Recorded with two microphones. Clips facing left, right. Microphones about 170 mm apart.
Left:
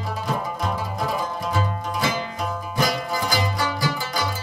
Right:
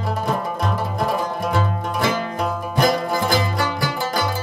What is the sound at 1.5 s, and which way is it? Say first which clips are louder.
Music: right 2 dB; 60° right (ahead or behind).